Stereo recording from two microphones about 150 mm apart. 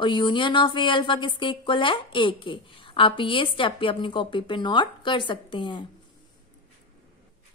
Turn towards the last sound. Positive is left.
turn(degrees=30)  # may be behind; listen again after turning